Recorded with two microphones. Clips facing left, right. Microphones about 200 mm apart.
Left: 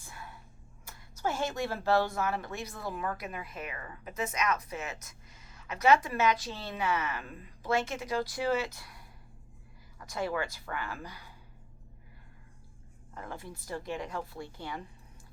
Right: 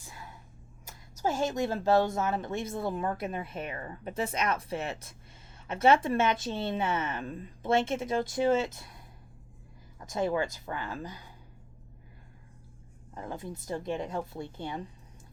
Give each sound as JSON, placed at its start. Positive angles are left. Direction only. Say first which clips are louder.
{"t": 0.0, "sound": "whispering", "louder": "even", "side_deg": -15}
{"t": 1.4, "sound": "speech", "louder": "right 4 dB", "side_deg": -20}
{"t": 13.1, "sound": "speech", "louder": "right 4 dB", "side_deg": -20}